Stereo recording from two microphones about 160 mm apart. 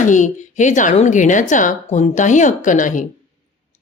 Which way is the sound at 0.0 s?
50° left (ahead or behind).